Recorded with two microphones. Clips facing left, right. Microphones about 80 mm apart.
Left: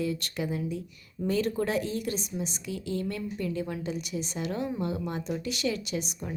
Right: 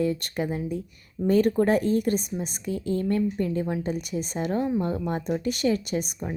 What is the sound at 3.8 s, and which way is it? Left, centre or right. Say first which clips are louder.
A woman's voice: right 4 dB; right.